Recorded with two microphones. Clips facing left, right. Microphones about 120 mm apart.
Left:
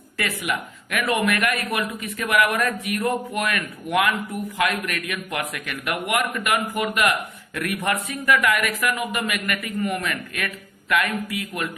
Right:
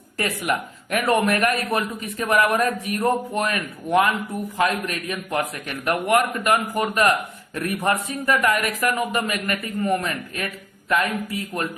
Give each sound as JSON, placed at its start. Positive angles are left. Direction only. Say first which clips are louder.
{"t": 0.2, "sound": "a man's voice", "louder": "right 2 dB", "side_deg": -40}